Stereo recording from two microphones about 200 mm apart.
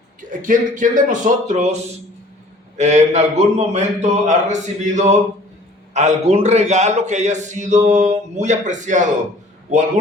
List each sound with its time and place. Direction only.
0.3 s a man's voice: 40° right (ahead or behind)